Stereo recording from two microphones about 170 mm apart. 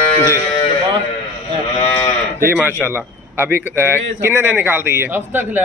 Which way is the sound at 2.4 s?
10° right (ahead or behind).